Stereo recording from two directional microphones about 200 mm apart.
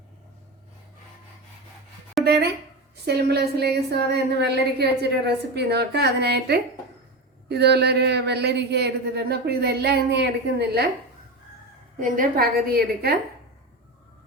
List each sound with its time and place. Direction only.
2.2 s a woman's voice: 55° right (ahead or behind)
11.9 s a woman's voice: 45° right (ahead or behind)